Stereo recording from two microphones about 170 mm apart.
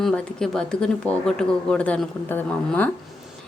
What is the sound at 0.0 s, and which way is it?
Speech, 5° left (ahead or behind).